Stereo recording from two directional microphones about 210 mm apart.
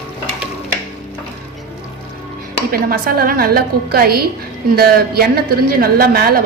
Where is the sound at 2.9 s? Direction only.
45° right (ahead or behind).